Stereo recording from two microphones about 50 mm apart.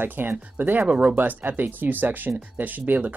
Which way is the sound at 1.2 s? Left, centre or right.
Right.